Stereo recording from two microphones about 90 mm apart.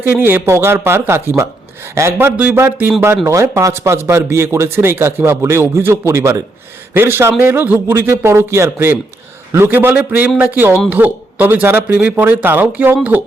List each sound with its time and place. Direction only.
0.0 s a man's voice: 25° right (ahead or behind)
2.3 s speech: 15° right (ahead or behind)
2.6 s a man's voice: 30° right (ahead or behind)